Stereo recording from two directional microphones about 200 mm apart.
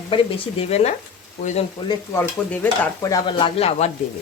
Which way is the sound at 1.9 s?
10° left (ahead or behind).